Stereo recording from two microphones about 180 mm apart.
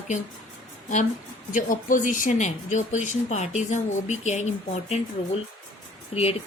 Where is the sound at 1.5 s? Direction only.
45° left (ahead or behind).